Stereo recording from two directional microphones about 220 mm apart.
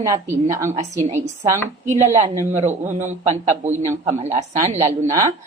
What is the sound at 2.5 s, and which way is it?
Speech, 30° right (ahead or behind).